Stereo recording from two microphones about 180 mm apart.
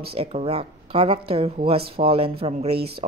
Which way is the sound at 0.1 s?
30° right (ahead or behind).